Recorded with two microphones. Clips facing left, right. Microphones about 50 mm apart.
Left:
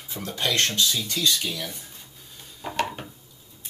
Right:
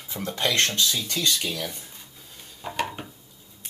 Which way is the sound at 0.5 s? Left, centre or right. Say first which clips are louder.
Even; right.